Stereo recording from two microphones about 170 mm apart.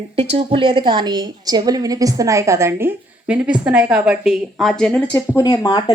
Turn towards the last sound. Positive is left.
turn(degrees=25)  # may be behind; listen again after turning